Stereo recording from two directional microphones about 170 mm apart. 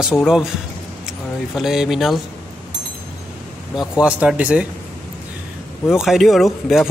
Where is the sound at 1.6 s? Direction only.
Centre (ahead or behind).